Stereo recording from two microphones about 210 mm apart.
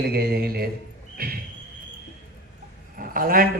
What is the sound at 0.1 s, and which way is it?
Speech, 50° right (ahead or behind).